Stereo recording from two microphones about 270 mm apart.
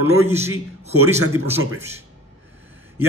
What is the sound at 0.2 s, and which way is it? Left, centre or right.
Speech, centre.